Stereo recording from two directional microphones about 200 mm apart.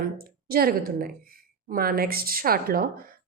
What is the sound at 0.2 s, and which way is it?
A woman's voice, 50° right (ahead or behind).